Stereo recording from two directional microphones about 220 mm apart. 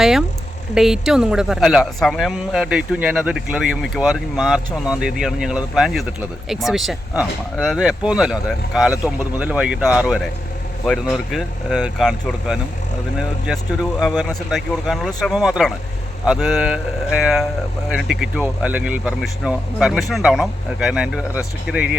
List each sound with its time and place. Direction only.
0.0 s speech: centre (ahead or behind)
14.2 s speech: centre (ahead or behind)